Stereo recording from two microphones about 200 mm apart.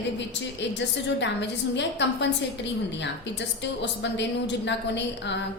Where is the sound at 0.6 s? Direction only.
60° left (ahead or behind).